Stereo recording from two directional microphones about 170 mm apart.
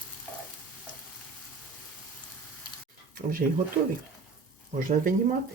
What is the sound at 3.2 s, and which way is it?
Speech, 55° right (ahead or behind).